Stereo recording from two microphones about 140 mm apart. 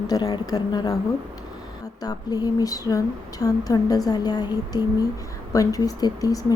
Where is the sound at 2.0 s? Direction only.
30° left (ahead or behind).